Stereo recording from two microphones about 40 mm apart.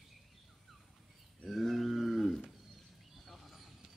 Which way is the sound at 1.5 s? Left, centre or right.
Centre.